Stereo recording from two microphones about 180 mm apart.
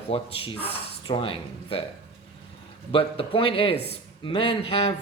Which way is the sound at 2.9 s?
30° left (ahead or behind).